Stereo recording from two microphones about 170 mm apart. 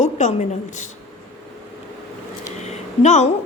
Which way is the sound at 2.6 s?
40° left (ahead or behind).